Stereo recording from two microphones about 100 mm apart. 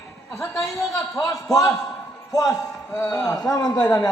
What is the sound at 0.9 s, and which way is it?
A man's voice, 35° left (ahead or behind).